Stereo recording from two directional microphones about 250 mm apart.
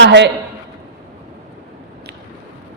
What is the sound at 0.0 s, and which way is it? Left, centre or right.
Speech, right.